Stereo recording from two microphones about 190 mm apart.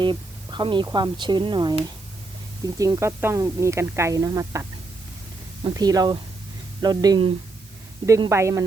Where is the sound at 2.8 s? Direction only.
15° right (ahead or behind).